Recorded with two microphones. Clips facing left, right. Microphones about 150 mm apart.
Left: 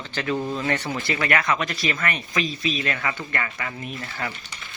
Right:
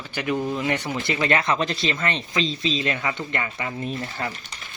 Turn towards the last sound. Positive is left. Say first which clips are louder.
# right 4 dB
turn(degrees=-30)  # may be behind; listen again after turning